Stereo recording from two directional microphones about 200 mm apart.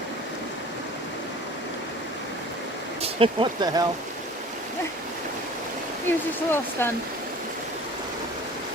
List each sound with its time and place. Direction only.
3.0 s speech: 25° right (ahead or behind)
6.1 s speech: 10° left (ahead or behind)